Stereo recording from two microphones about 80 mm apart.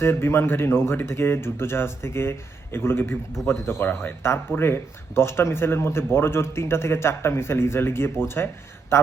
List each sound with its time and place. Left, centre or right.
0.0 s speech: left